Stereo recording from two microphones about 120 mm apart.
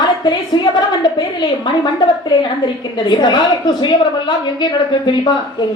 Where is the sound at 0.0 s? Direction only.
40° left (ahead or behind).